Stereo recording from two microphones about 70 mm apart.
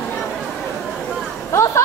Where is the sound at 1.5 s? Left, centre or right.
Left.